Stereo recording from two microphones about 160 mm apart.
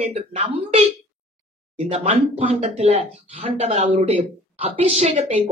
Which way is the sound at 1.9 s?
40° right (ahead or behind).